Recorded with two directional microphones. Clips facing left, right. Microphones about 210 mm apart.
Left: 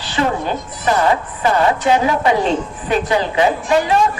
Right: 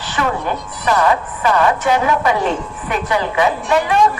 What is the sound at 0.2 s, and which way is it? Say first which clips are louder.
A woman's voice: left 2 dB; 25° left (ahead or behind).